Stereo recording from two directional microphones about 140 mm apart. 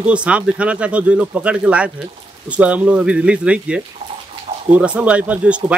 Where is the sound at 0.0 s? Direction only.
10° right (ahead or behind).